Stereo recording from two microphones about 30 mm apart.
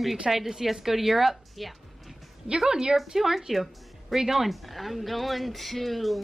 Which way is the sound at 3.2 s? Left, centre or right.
Centre.